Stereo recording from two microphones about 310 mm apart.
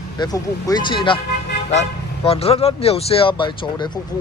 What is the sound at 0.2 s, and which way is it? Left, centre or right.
Speech, centre.